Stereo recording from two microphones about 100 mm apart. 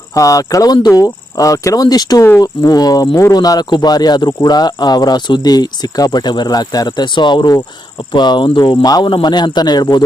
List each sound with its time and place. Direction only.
0.1 s speech: 35° left (ahead or behind)